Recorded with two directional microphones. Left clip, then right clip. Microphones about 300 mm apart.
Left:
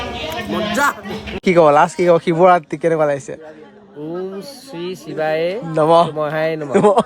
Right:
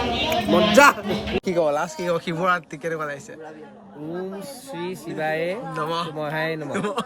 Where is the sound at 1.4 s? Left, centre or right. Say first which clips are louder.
Left 12 dB; left.